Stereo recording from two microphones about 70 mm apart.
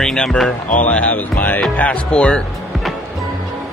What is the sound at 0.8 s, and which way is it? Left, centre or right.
Speech, left.